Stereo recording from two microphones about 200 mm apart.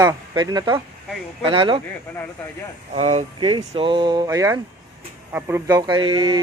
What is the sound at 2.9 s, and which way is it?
Speech, 35° right (ahead or behind).